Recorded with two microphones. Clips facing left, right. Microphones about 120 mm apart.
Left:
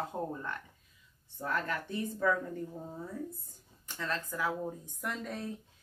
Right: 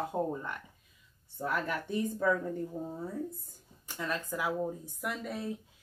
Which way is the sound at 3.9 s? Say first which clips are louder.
Right 1 dB; 15° right (ahead or behind).